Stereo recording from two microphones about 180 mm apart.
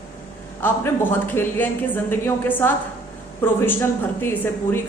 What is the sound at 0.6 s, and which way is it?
Speech, 10° left (ahead or behind).